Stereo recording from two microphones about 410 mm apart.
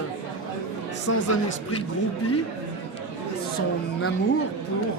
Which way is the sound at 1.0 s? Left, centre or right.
Left.